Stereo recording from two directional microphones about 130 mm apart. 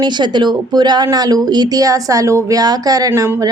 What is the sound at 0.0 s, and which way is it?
Speech, 35° right (ahead or behind).